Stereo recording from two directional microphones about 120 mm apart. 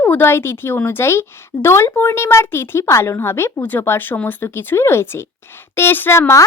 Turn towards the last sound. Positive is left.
turn(degrees=20)  # may be behind; listen again after turning